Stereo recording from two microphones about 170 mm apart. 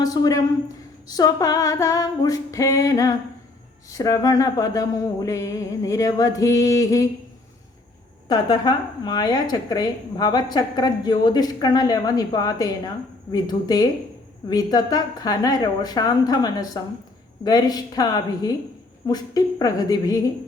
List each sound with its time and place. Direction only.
0.0 s a woman's voice: 20° left (ahead or behind)
8.3 s a woman's voice: 25° left (ahead or behind)